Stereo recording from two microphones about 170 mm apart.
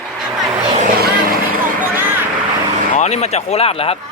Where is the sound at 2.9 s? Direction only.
40° left (ahead or behind).